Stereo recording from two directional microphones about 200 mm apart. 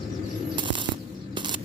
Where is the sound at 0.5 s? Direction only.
25° right (ahead or behind).